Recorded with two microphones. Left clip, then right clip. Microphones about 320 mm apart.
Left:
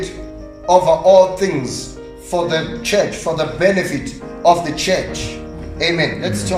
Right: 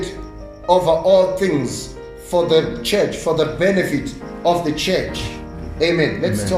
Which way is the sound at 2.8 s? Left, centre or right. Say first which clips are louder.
Left 2 dB; left.